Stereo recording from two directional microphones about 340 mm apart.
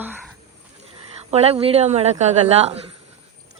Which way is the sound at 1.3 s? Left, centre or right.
Centre.